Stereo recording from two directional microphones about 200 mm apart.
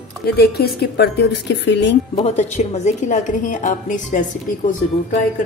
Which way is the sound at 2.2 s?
35° left (ahead or behind).